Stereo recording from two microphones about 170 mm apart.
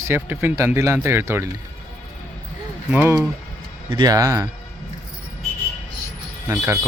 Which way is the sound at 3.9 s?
20° right (ahead or behind).